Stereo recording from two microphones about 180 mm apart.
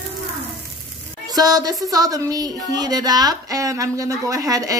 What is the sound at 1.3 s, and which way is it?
Speech, 20° right (ahead or behind).